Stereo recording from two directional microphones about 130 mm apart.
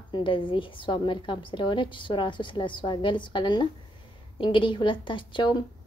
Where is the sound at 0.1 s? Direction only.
40° left (ahead or behind).